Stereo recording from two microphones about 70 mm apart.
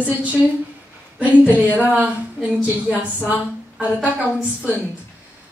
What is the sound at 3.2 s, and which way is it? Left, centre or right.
A woman's voice, centre.